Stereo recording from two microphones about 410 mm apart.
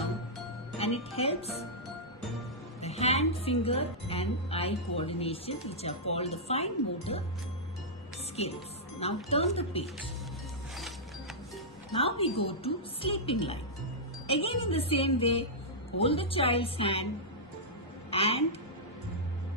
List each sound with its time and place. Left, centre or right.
0.8 s a woman's voice: centre
2.8 s a woman's voice: centre
9.0 s a woman's voice: centre
11.9 s a woman's voice: centre
18.1 s a woman's voice: centre